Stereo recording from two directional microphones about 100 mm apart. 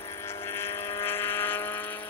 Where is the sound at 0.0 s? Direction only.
25° left (ahead or behind).